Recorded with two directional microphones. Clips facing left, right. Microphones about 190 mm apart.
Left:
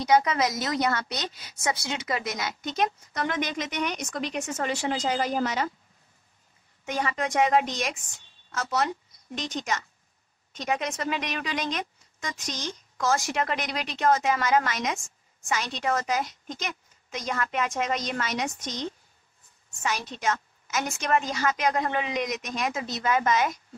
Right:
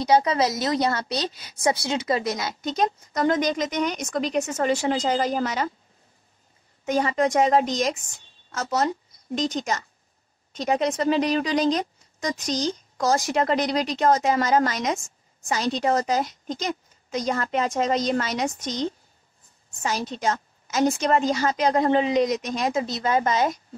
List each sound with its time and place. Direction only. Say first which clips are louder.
0.0 s speech: right 3 dB; 30° right (ahead or behind)
6.9 s speech: right 7 dB; 40° right (ahead or behind)